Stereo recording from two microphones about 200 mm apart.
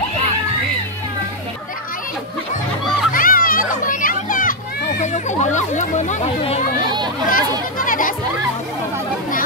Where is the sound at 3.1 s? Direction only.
45° left (ahead or behind).